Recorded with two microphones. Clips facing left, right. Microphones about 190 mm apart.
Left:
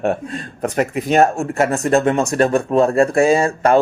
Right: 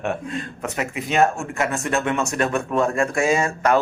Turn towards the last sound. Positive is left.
turn(degrees=30)  # may be behind; listen again after turning